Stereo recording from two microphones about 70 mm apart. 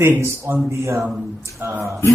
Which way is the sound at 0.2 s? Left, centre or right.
Right.